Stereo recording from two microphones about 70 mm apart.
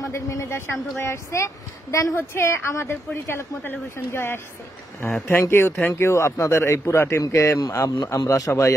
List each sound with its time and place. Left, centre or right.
0.1 s a man's voice: left
8.3 s a man's voice: left